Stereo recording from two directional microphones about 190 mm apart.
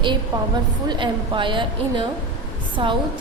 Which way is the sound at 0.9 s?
25° right (ahead or behind).